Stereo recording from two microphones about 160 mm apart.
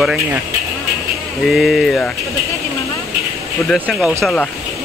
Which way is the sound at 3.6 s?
10° left (ahead or behind).